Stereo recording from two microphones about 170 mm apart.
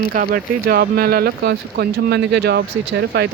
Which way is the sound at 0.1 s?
60° right (ahead or behind).